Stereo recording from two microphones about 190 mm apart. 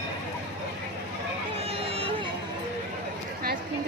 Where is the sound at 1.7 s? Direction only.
30° right (ahead or behind).